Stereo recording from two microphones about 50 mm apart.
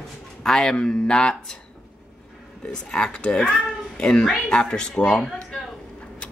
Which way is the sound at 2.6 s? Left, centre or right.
Centre.